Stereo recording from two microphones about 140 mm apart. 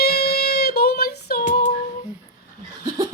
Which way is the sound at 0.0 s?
90° left.